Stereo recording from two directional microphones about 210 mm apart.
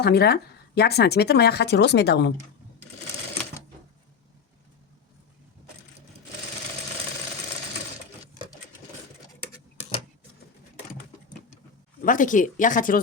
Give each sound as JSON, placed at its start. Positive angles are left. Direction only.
{"t": 0.0, "sound": "speech", "side_deg": 50}
{"t": 12.0, "sound": "speech", "side_deg": 40}